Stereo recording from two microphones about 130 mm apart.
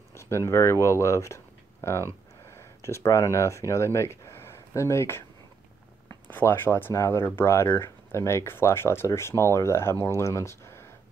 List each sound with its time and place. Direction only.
0.1 s speech: 20° left (ahead or behind)